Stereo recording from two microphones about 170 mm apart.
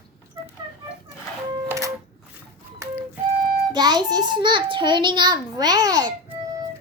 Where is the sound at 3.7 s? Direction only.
25° right (ahead or behind).